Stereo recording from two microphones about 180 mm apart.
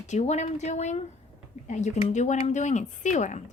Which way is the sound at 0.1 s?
40° left (ahead or behind).